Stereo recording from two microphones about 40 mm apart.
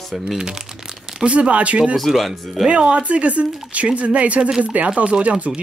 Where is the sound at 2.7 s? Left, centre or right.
Right.